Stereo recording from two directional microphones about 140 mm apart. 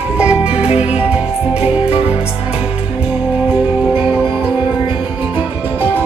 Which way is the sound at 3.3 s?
10° right (ahead or behind).